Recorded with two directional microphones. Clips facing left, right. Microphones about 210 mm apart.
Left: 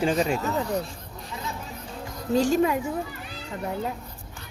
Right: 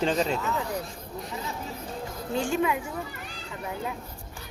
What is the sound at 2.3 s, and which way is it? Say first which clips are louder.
Speech: left 5 dB; 40° left (ahead or behind).